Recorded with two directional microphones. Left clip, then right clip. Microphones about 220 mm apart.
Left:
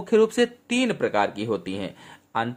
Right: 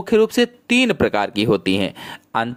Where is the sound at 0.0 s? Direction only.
30° right (ahead or behind).